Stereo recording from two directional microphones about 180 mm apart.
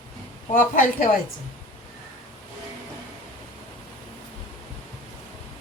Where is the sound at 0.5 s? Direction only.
50° left (ahead or behind).